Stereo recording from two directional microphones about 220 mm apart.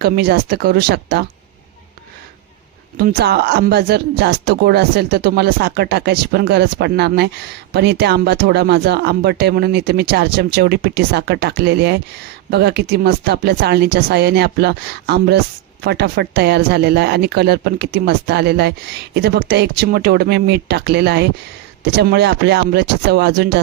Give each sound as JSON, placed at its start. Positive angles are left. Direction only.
{"t": 0.0, "sound": "speech", "side_deg": -45}
{"t": 3.0, "sound": "speech", "side_deg": -45}